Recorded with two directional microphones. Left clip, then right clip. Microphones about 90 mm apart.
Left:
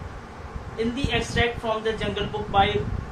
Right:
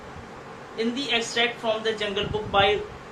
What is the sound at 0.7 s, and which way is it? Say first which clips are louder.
Speech: right 1 dB; 15° right (ahead or behind).